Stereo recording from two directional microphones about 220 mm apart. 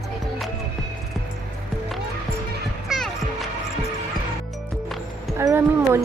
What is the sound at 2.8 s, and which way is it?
Music, centre (ahead or behind).